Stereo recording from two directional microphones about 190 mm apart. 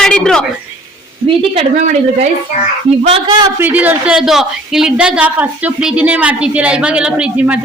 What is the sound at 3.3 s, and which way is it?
Speech, 20° right (ahead or behind).